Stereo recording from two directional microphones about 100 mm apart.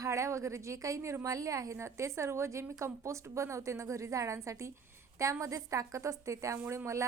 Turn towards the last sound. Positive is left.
turn(degrees=-30)  # may be behind; listen again after turning